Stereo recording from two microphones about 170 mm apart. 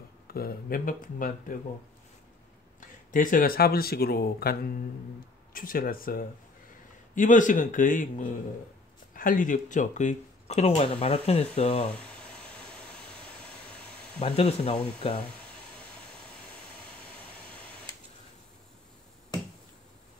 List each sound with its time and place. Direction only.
0.3 s speech: 60° left (ahead or behind)
3.1 s a man's voice: 55° left (ahead or behind); by 11.9 s 35° left (ahead or behind)
11.9 s a sound: 5° left (ahead or behind)
14.2 s speech: 35° left (ahead or behind)